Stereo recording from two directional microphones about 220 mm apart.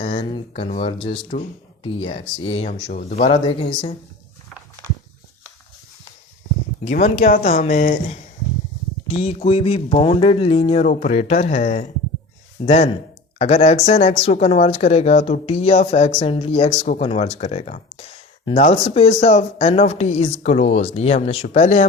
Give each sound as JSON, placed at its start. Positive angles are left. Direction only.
{"t": 0.0, "sound": "speech", "side_deg": 25}
{"t": 6.8, "sound": "speech", "side_deg": 30}